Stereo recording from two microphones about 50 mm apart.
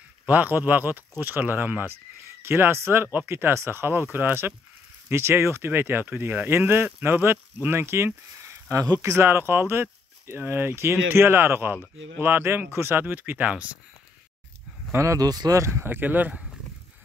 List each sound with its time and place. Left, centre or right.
0.3 s speech: right
2.4 s speech: right
5.1 s speech: right
8.4 s speech: right
13.0 s speech: right
15.0 s speech: right
15.7 s speech: right